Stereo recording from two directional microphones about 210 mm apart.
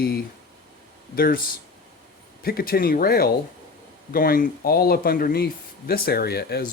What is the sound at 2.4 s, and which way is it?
Speech, 45° left (ahead or behind).